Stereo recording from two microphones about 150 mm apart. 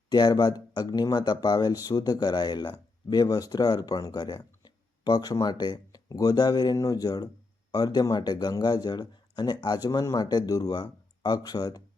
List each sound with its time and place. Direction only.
0.1 s speech: 30° left (ahead or behind)